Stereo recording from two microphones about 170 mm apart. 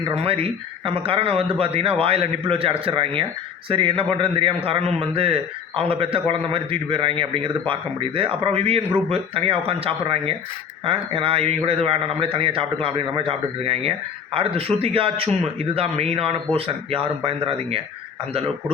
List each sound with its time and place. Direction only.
0.0 s a man's voice: 35° right (ahead or behind)